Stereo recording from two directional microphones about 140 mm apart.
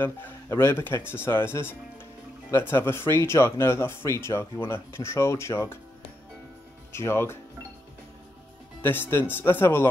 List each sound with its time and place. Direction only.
0.0 s speech: 15° left (ahead or behind)
6.9 s speech: 20° left (ahead or behind)
8.8 s speech: 15° left (ahead or behind)